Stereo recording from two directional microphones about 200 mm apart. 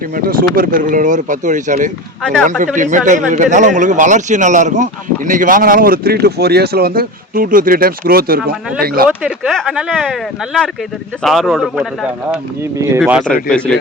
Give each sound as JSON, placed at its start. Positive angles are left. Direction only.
{"t": 0.2, "sound": "speech", "side_deg": -45}
{"t": 2.2, "sound": "speech", "side_deg": 5}
{"t": 2.7, "sound": "a man's voice", "side_deg": -40}
{"t": 9.0, "sound": "speech", "side_deg": 0}